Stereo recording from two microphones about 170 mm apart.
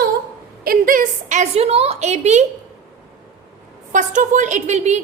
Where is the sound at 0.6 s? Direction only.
55° right (ahead or behind).